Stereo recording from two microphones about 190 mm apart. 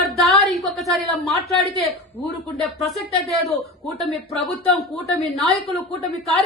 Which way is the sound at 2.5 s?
Centre (ahead or behind).